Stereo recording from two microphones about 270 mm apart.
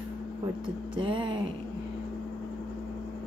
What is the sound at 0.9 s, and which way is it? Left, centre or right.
Speech, centre.